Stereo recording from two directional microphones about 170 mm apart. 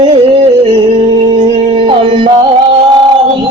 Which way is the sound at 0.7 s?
30° right (ahead or behind).